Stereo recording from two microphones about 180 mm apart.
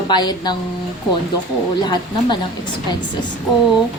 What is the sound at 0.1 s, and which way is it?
Speech, 25° left (ahead or behind).